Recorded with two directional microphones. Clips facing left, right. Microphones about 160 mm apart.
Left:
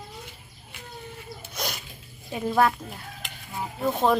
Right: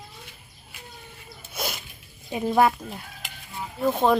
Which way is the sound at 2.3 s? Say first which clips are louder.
Right 2 dB; 15° right (ahead or behind).